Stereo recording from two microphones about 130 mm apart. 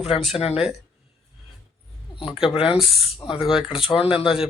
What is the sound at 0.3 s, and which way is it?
Speech, 50° left (ahead or behind).